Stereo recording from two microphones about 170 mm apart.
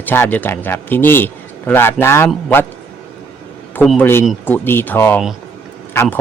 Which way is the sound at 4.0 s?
15° left (ahead or behind).